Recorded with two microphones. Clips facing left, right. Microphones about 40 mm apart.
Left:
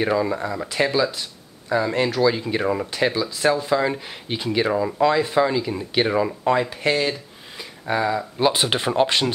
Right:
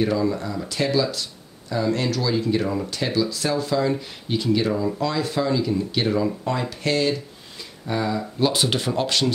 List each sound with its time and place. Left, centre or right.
0.0 s speech: left